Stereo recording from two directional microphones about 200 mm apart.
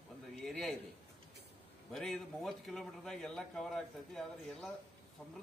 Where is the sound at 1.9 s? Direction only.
Centre (ahead or behind).